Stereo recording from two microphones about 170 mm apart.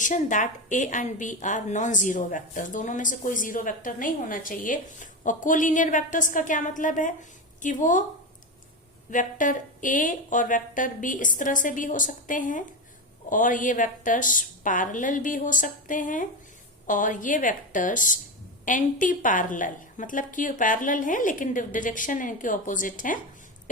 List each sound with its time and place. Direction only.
0.0 s a woman's voice: 50° left (ahead or behind)
9.0 s a woman's voice: 50° left (ahead or behind)